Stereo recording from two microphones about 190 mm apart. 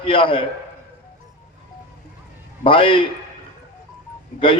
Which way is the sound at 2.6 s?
25° left (ahead or behind).